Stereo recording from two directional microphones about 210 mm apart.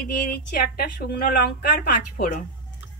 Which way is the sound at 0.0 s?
45° left (ahead or behind).